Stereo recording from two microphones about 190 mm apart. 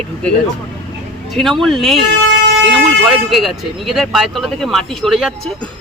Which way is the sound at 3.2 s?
Centre (ahead or behind).